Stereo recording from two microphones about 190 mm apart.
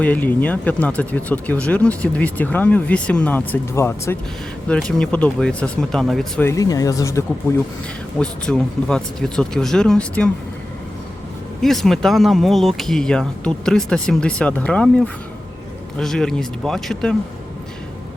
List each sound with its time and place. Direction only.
0.0 s speech: 10° left (ahead or behind)
6.4 s speech: 15° left (ahead or behind)
8.2 s speech: 5° left (ahead or behind)
11.6 s speech: centre (ahead or behind)